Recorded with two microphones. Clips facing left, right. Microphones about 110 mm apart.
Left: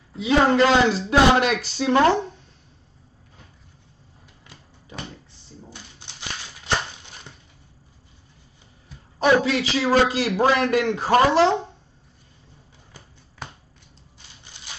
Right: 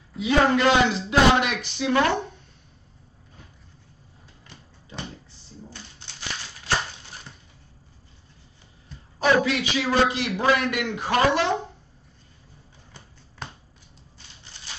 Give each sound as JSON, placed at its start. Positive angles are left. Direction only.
{"t": 0.1, "sound": "a man's voice", "side_deg": 30}
{"t": 5.7, "sound": "shuffling cards", "side_deg": 15}
{"t": 9.2, "sound": "a man's voice", "side_deg": 30}